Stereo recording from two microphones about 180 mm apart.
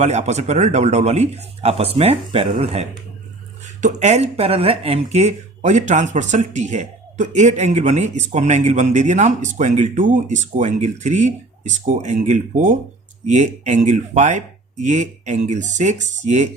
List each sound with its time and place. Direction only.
0.0 s speech: 40° right (ahead or behind)